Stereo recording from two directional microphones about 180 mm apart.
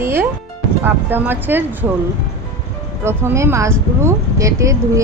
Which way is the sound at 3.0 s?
15° right (ahead or behind).